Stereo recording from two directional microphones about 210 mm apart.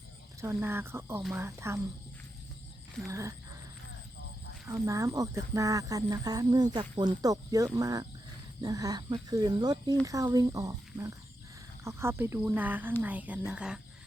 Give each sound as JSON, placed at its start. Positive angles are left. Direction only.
{"t": 0.4, "sound": "speech", "side_deg": -10}
{"t": 3.1, "sound": "speech", "side_deg": -15}
{"t": 4.6, "sound": "speech", "side_deg": -15}